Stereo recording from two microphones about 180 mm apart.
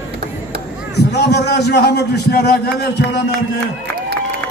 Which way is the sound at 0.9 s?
65° left (ahead or behind).